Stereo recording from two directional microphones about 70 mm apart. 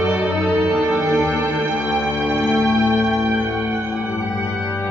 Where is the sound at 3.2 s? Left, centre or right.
Centre.